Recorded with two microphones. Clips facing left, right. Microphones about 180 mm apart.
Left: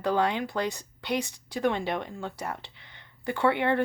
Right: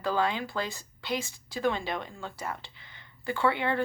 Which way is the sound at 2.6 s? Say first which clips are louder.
Left 1 dB; 65° left (ahead or behind).